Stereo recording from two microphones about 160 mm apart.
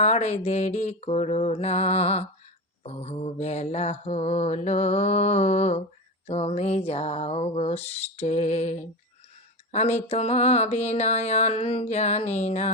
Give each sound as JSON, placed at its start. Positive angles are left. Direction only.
{"t": 0.0, "sound": "mantra", "side_deg": 45}
{"t": 6.2, "sound": "a sound", "side_deg": 40}
{"t": 9.7, "sound": "mantra", "side_deg": 45}